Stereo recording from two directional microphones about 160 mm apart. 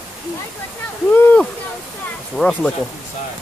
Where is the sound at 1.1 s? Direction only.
10° left (ahead or behind).